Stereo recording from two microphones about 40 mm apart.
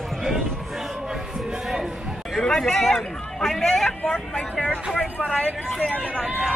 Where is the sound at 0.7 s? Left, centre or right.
Centre.